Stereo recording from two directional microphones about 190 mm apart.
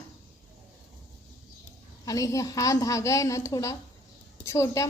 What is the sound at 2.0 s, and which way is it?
A woman's voice, 15° left (ahead or behind).